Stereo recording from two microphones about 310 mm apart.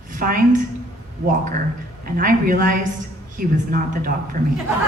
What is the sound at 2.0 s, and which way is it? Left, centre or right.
A woman's voice, right.